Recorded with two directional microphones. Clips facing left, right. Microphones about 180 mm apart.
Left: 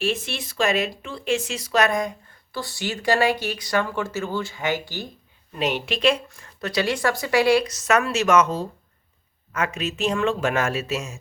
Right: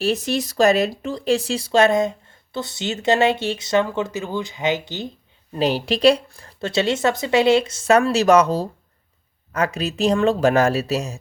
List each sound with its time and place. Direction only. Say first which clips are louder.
0.0 s speech: right 5 dB; 40° right (ahead or behind); by 5.0 s 20° right (ahead or behind)
5.5 s speech: right 5 dB; 35° right (ahead or behind)